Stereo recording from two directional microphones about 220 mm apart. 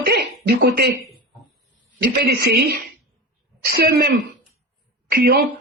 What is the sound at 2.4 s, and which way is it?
A woman's voice, 45° right (ahead or behind).